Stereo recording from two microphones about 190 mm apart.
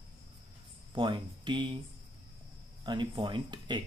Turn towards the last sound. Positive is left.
turn(degrees=-25)  # may be behind; listen again after turning